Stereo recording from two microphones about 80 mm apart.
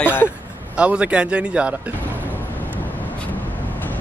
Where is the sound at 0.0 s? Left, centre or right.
Left.